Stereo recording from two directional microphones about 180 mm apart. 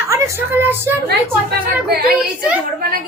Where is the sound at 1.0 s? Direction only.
60° right (ahead or behind).